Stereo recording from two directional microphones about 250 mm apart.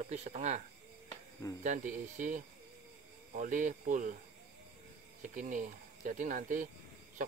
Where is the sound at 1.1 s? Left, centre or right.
Centre.